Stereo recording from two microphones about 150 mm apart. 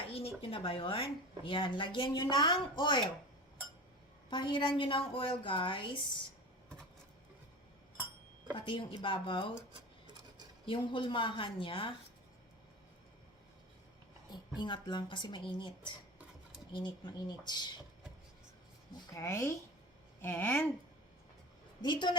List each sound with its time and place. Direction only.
0.1 s speech: 40° left (ahead or behind)
4.3 s speech: 35° left (ahead or behind)
8.5 s speech: 35° left (ahead or behind)
10.7 s speech: 35° left (ahead or behind)
14.3 s speech: 30° left (ahead or behind)
19.1 s speech: 20° left (ahead or behind)
21.8 s a woman's voice: 30° left (ahead or behind)